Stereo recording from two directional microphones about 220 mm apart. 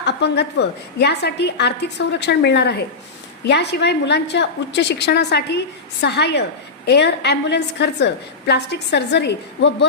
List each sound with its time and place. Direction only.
0.0 s a woman's voice: 50° left (ahead or behind)